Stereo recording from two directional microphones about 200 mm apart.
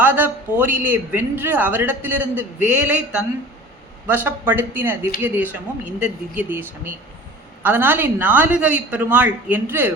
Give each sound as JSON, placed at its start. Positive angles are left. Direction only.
{"t": 0.0, "sound": "a man's voice", "side_deg": -10}